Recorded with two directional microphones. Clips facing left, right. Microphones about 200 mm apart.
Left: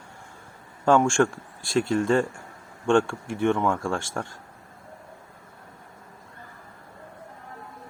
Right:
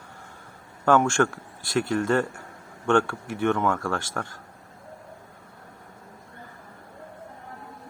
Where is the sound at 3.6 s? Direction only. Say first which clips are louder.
Even; 25° left (ahead or behind).